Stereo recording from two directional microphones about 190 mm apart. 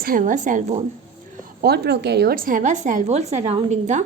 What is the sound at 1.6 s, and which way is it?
A woman's voice, 55° right (ahead or behind).